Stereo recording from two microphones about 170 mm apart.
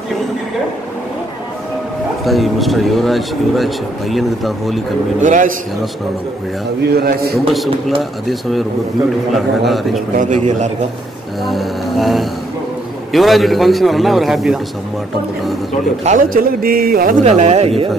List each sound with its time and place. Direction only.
2.2 s speech: centre (ahead or behind)
5.2 s a man's voice: 50° right (ahead or behind)
6.9 s a man's voice: 65° right (ahead or behind)
8.0 s speech: centre (ahead or behind)
10.1 s a man's voice: 45° right (ahead or behind)
11.4 s speech: centre (ahead or behind)
16.0 s a man's voice: 50° right (ahead or behind)
17.2 s speech: 40° right (ahead or behind)